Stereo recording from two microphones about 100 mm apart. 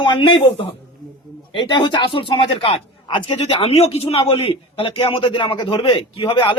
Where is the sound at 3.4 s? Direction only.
90° left; by 6.5 s 60° left (ahead or behind).